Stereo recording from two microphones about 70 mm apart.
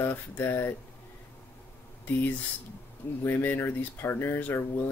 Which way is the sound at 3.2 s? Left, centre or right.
Left.